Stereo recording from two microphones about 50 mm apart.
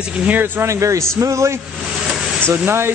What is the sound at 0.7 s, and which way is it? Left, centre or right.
Speech, right.